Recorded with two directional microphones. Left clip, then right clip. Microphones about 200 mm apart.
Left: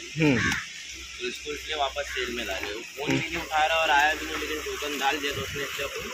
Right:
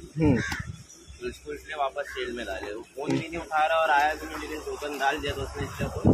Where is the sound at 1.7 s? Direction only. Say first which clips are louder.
Left 1 dB; 5° right (ahead or behind).